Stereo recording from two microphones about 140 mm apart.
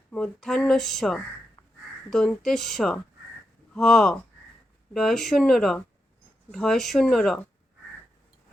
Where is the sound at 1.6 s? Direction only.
35° left (ahead or behind).